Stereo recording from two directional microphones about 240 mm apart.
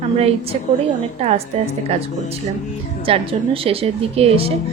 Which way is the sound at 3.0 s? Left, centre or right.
Right.